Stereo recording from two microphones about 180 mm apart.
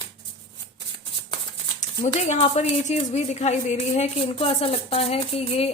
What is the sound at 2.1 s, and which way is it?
Speech, 40° left (ahead or behind).